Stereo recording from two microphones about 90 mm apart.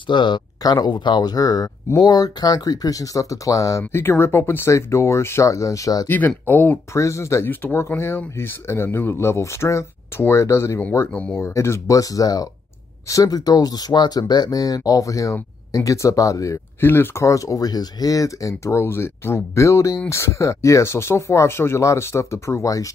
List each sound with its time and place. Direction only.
0.0 s speech: 60° left (ahead or behind)
0.6 s speech: 45° left (ahead or behind)
3.9 s speech: 30° left (ahead or behind)
6.0 s speech: 20° left (ahead or behind)
6.9 s speech: 35° left (ahead or behind)
10.8 s speech: 20° left (ahead or behind)
11.3 s speech: 30° left (ahead or behind)
16.8 s speech: 25° left (ahead or behind)